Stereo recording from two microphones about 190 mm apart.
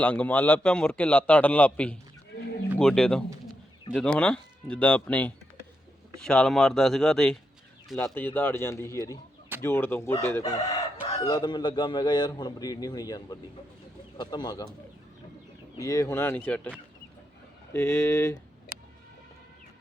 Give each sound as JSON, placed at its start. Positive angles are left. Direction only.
{"t": 0.0, "sound": "a man's voice", "side_deg": 5}
{"t": 15.8, "sound": "a man's voice", "side_deg": 15}
{"t": 17.7, "sound": "a man's voice", "side_deg": 15}